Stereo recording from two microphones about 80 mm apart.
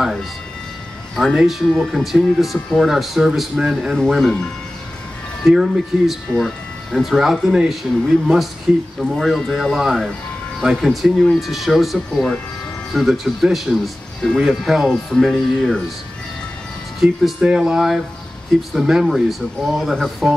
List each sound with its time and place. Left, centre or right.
1.1 s speech: centre
5.5 s speech: centre
9.1 s speech: centre
17.0 s speech: centre